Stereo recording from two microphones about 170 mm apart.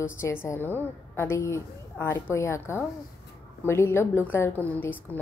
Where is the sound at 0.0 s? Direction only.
15° left (ahead or behind).